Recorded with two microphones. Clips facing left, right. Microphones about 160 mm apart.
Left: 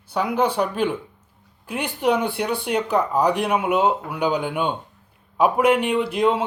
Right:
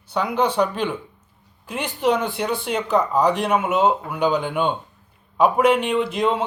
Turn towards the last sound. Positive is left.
turn(degrees=10)  # may be behind; listen again after turning